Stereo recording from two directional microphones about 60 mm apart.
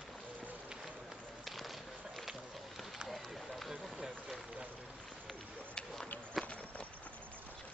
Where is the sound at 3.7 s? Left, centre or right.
Centre.